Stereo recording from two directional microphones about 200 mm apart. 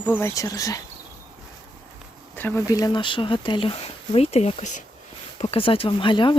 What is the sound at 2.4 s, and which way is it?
Speech, 10° left (ahead or behind).